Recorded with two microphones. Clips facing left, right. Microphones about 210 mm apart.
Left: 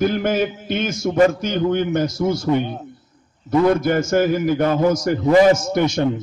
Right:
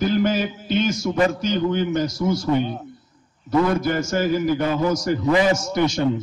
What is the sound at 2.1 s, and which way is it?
Speech, 25° left (ahead or behind).